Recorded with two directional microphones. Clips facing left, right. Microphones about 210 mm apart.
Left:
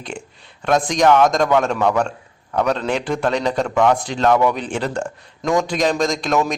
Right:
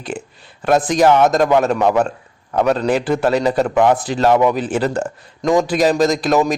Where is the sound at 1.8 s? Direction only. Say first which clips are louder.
Right 3 dB; 20° right (ahead or behind).